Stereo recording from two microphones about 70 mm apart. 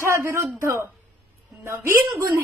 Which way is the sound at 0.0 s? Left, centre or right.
Right.